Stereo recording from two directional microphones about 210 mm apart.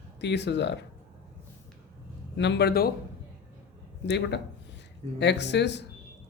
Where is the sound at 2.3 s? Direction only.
55° left (ahead or behind).